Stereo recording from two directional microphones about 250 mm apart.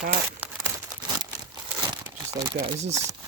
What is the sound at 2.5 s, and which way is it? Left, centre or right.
Speech, centre.